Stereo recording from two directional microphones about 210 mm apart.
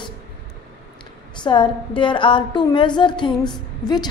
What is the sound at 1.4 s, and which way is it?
A woman's voice, 20° left (ahead or behind).